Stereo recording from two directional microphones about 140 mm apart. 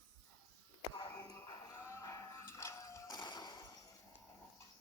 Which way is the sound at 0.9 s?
25° left (ahead or behind).